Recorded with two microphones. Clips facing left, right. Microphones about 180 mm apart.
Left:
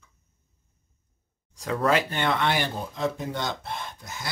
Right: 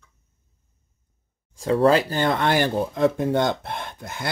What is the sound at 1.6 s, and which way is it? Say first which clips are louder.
Speech: right 6 dB; 30° right (ahead or behind).